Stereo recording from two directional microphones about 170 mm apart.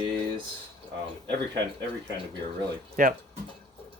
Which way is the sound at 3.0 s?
50° right (ahead or behind).